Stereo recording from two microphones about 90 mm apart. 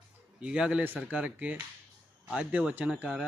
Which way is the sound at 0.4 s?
10° right (ahead or behind).